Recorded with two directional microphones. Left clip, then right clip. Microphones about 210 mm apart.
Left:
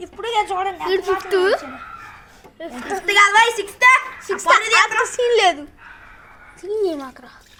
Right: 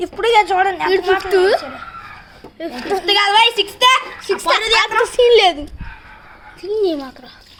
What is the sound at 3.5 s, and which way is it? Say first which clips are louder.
Speech: right 1 dB; 35° right (ahead or behind).